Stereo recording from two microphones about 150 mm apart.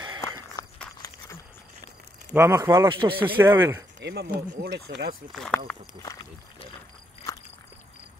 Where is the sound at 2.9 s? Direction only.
35° right (ahead or behind).